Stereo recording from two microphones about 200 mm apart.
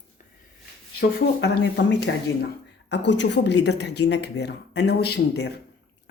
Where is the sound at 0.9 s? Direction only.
55° left (ahead or behind).